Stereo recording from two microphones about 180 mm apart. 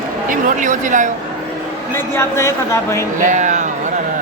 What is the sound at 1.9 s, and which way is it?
Speech, 15° left (ahead or behind).